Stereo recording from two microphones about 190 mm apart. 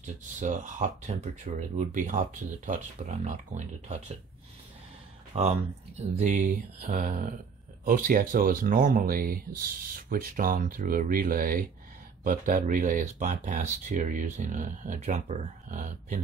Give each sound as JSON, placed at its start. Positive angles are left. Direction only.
{"t": 0.0, "sound": "speech", "side_deg": -40}
{"t": 5.3, "sound": "speech", "side_deg": -35}